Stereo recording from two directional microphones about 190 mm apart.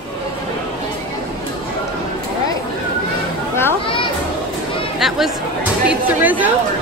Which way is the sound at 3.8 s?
25° left (ahead or behind).